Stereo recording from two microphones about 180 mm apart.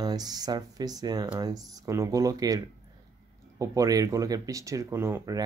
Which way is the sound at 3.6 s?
20° right (ahead or behind).